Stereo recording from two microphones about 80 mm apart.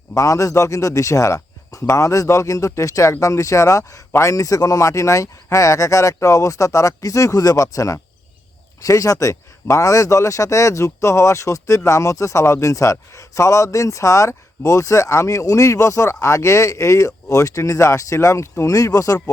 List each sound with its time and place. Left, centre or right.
0.1 s a man's voice: left